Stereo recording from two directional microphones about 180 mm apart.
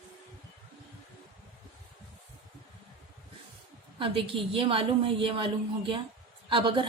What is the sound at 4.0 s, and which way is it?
Speech, 30° right (ahead or behind).